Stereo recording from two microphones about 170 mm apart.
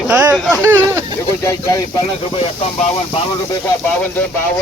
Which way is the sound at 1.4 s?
15° left (ahead or behind).